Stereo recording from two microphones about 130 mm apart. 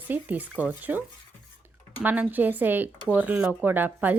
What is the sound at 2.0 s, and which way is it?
Speech, 15° right (ahead or behind).